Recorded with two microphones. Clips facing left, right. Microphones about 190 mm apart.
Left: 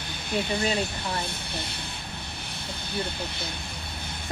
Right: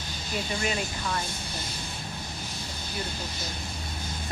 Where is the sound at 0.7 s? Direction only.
30° left (ahead or behind).